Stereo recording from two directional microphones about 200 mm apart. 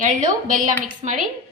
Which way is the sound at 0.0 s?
40° right (ahead or behind).